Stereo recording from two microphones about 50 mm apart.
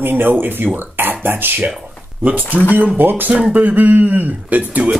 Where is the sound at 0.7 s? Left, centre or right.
Right.